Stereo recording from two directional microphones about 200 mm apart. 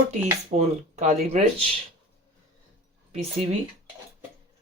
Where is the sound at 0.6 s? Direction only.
35° right (ahead or behind).